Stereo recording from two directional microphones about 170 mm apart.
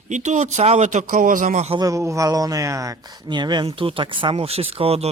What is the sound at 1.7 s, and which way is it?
Speech, 20° right (ahead or behind).